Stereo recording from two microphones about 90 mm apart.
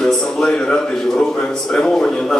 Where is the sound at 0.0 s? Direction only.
10° left (ahead or behind).